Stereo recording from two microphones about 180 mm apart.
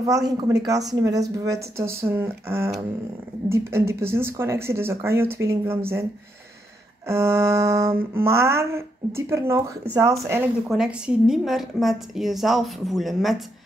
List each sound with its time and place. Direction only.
0.0 s speech: 20° right (ahead or behind)
1.8 s music: 15° right (ahead or behind)
7.1 s music: 15° right (ahead or behind)
10.7 s a woman's voice: 5° right (ahead or behind)